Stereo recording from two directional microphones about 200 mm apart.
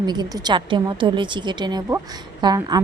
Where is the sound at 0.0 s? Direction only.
20° right (ahead or behind).